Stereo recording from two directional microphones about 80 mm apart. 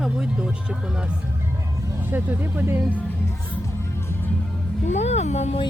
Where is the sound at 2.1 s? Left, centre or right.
Right.